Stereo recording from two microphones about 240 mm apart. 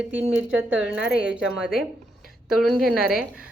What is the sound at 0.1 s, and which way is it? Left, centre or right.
Speech, centre.